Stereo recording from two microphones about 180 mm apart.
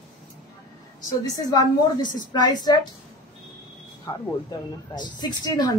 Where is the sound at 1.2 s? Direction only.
20° left (ahead or behind).